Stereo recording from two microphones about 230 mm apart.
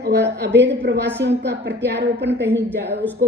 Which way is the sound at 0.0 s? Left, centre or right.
Right.